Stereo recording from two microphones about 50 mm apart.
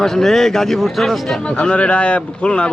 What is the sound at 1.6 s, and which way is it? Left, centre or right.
A man's voice, left.